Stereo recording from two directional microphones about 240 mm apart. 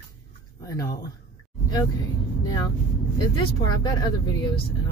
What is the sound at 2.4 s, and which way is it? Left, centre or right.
Vehicle, centre.